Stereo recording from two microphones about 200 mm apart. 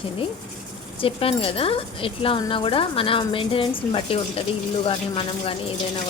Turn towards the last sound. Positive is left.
turn(degrees=25)  # may be behind; listen again after turning